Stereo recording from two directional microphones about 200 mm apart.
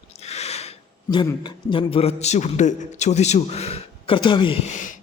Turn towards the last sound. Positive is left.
turn(degrees=40)  # may be behind; listen again after turning